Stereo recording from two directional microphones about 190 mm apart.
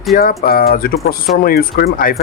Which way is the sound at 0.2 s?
50° left (ahead or behind).